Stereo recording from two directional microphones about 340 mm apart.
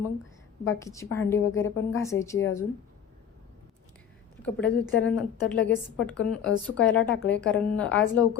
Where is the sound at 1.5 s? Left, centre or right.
Left.